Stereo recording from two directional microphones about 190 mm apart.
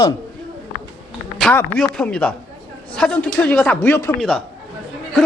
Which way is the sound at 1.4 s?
5° left (ahead or behind).